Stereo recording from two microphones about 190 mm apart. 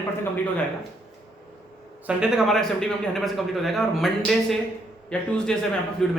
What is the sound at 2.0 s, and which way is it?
A man's voice, 5° right (ahead or behind).